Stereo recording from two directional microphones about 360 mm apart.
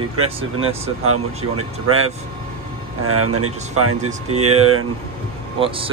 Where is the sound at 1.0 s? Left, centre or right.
Right.